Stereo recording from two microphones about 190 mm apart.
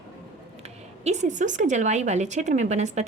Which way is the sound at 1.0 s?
40° right (ahead or behind).